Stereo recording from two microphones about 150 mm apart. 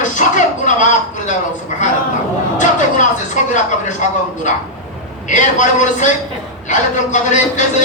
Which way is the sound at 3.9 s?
55° left (ahead or behind).